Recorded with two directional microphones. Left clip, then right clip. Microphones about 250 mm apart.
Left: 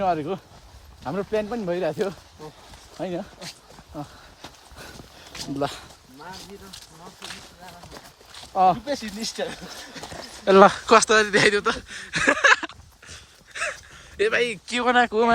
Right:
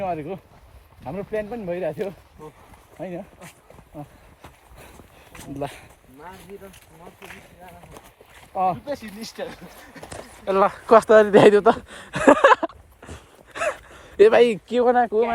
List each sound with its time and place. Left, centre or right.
0.0 s speech: centre
5.5 s speech: centre
8.7 s speech: left
10.8 s speech: centre
13.5 s a sound: centre
14.7 s speech: centre